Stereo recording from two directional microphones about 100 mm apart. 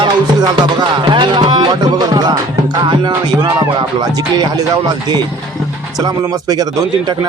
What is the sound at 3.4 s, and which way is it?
A man's voice, 55° right (ahead or behind).